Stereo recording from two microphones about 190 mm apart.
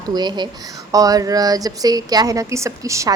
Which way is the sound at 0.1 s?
20° right (ahead or behind).